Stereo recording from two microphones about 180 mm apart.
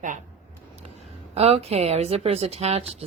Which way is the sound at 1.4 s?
35° right (ahead or behind).